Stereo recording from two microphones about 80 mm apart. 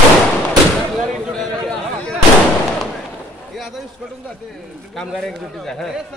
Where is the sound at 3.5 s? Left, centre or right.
Centre.